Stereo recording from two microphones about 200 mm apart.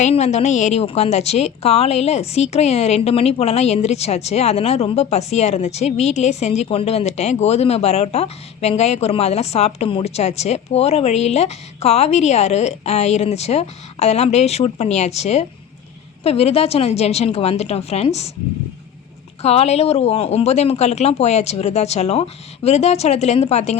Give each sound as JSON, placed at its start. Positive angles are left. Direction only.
{"t": 0.0, "sound": "a woman's voice", "side_deg": 35}
{"t": 19.4, "sound": "a woman's voice", "side_deg": 30}